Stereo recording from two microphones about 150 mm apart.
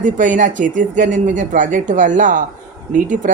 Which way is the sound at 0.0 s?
60° right (ahead or behind).